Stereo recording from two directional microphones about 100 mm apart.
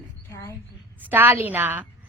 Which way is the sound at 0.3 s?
25° left (ahead or behind).